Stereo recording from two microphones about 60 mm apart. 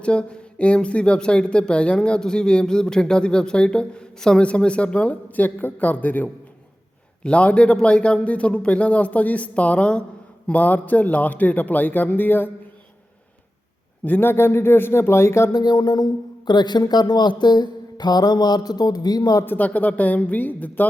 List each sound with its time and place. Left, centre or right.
0.0 s speech: centre
7.3 s a man's voice: centre
14.0 s speech: left
15.5 s a man's voice: left
18.3 s a man's voice: left
19.5 s a man's voice: left